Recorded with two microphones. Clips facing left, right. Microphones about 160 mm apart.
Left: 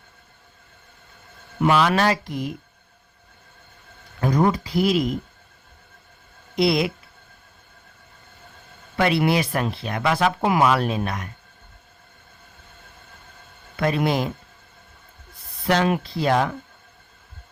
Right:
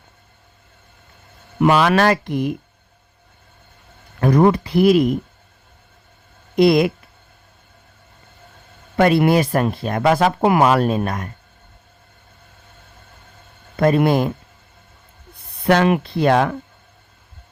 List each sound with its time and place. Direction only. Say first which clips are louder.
1.6 s speech: right 4 dB; 65° right (ahead or behind)
4.2 s speech: right 6 dB; 60° right (ahead or behind)
6.6 s speech: right 7 dB; 50° right (ahead or behind)
9.0 s speech: right 6 dB; 50° right (ahead or behind)
13.7 s speech: right 6 dB; 45° right (ahead or behind)
15.6 s speech: right 5 dB; 60° right (ahead or behind)